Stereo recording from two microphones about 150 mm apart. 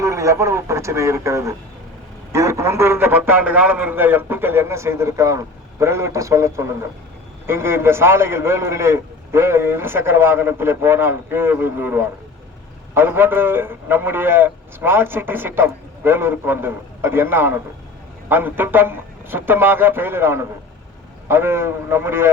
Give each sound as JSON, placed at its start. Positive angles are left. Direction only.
{"t": 0.0, "sound": "a man's voice", "side_deg": -20}